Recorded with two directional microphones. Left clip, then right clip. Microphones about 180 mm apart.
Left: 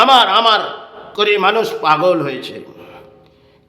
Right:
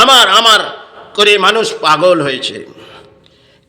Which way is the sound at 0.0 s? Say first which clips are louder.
Right 3 dB; 10° right (ahead or behind).